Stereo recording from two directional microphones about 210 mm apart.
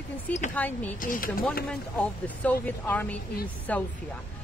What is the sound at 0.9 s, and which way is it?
Speech, 40° left (ahead or behind).